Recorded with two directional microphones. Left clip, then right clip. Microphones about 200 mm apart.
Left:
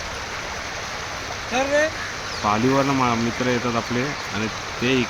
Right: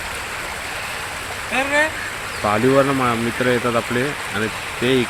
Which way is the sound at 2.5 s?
Centre (ahead or behind).